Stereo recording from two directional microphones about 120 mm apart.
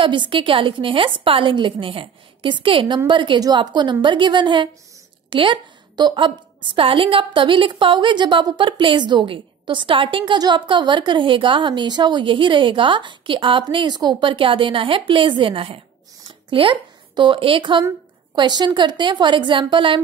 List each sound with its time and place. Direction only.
0.0 s a woman's voice: 45° right (ahead or behind)